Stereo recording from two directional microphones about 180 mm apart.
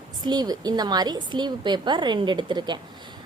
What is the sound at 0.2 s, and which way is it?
A woman's voice, 25° right (ahead or behind).